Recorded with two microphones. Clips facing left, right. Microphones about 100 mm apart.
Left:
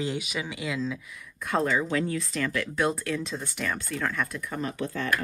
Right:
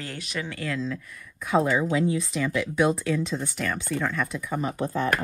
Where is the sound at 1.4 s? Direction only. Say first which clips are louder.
Right 3 dB; 10° right (ahead or behind).